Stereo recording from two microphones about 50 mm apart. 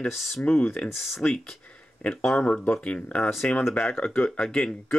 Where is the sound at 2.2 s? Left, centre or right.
Centre.